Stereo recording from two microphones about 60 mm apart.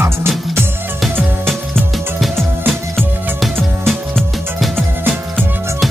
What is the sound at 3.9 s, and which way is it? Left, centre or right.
Music, centre.